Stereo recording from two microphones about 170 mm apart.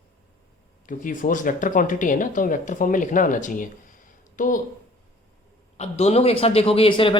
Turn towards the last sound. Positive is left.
turn(degrees=30)  # may be behind; listen again after turning